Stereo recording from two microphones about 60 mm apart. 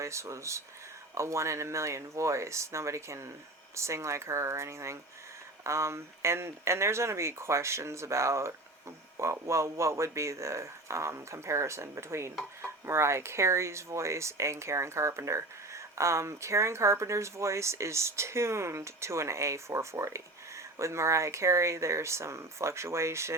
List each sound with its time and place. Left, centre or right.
0.0 s speech: right